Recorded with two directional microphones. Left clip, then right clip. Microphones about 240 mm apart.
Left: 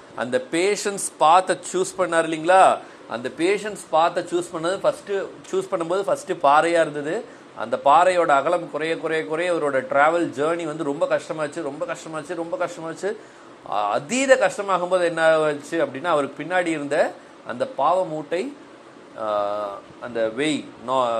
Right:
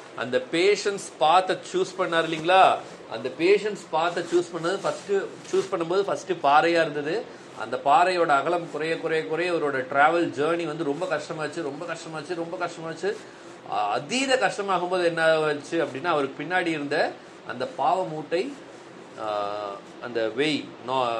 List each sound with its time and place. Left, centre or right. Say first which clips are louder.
0.2 s speech: left 1 dB; left